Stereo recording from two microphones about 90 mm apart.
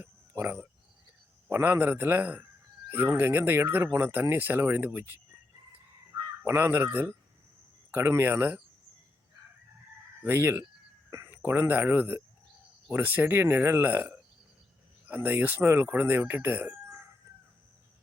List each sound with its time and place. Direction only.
0.4 s speech: 25° right (ahead or behind)
6.4 s speech: 25° right (ahead or behind)
10.2 s speech: 25° right (ahead or behind)